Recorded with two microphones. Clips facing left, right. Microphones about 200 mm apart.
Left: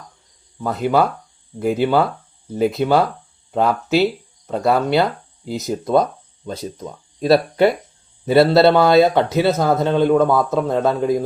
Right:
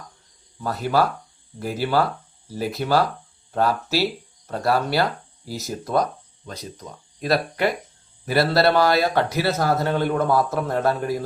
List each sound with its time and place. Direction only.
0.6 s speech: 20° left (ahead or behind)
4.4 s speech: 20° left (ahead or behind)